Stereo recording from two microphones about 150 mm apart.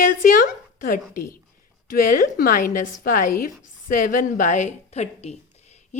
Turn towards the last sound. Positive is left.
turn(degrees=45)  # may be behind; listen again after turning